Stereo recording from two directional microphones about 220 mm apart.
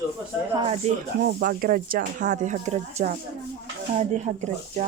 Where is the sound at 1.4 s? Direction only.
40° right (ahead or behind).